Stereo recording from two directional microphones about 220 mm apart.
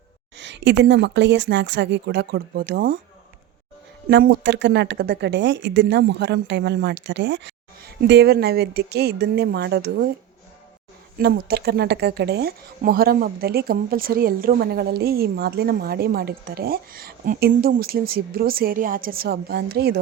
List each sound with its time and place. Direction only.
0.3 s speech: 55° right (ahead or behind)
4.1 s speech: 50° right (ahead or behind)
11.2 s speech: 45° right (ahead or behind)